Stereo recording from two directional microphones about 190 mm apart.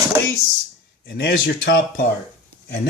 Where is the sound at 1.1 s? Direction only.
60° left (ahead or behind).